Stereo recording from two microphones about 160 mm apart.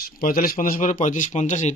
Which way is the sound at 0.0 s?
65° left (ahead or behind).